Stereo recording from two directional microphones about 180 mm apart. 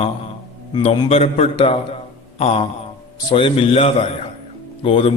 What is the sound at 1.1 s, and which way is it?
A man's voice, 35° left (ahead or behind).